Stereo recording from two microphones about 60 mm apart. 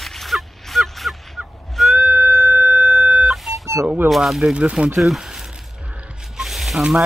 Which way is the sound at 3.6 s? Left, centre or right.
Right.